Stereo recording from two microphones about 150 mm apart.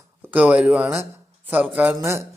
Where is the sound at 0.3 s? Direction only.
10° right (ahead or behind).